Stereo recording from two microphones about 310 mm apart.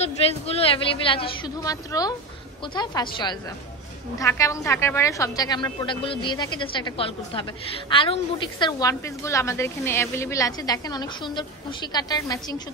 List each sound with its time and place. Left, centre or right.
0.0 s a woman's voice: centre